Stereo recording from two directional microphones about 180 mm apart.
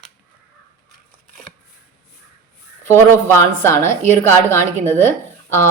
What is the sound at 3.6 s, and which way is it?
A woman's voice, 15° left (ahead or behind).